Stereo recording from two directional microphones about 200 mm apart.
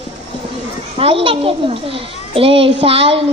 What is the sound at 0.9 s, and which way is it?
A child's voice, 25° right (ahead or behind).